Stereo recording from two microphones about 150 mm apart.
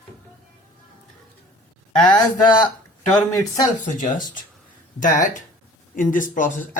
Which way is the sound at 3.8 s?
60° left (ahead or behind).